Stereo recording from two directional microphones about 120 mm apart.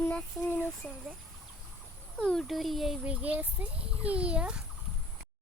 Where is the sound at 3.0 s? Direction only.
10° right (ahead or behind).